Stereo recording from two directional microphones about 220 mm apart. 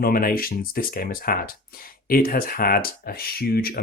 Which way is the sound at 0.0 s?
40° left (ahead or behind).